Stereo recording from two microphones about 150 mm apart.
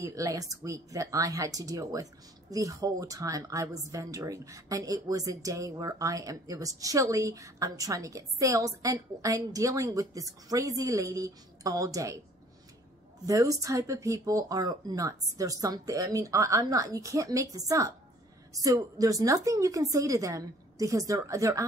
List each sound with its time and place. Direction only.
0.0 s speech: 20° right (ahead or behind)
13.3 s speech: 20° right (ahead or behind)